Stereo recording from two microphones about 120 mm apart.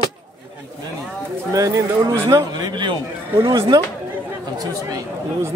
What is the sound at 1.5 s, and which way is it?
A man's voice, 25° right (ahead or behind).